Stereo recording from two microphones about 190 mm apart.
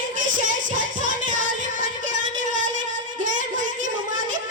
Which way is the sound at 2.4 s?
45° right (ahead or behind).